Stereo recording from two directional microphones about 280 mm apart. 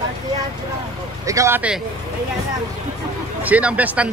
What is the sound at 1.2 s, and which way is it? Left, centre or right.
Speech, centre.